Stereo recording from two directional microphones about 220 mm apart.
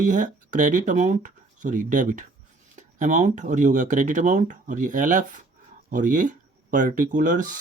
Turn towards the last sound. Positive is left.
turn(degrees=-35)  # may be behind; listen again after turning